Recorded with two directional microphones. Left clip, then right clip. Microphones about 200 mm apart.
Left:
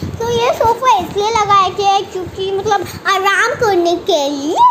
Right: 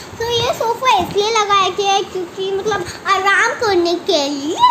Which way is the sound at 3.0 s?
30° left (ahead or behind).